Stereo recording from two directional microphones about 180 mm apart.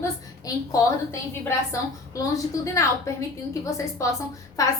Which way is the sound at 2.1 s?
20° left (ahead or behind).